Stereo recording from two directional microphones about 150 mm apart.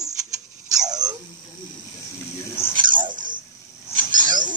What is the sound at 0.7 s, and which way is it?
Dog, 25° right (ahead or behind).